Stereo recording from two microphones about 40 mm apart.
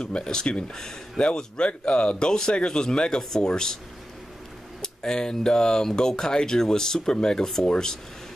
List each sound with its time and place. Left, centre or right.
0.0 s speech: left
4.8 s speech: centre